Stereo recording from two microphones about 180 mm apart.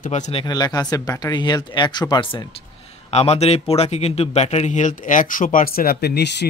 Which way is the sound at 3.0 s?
35° left (ahead or behind).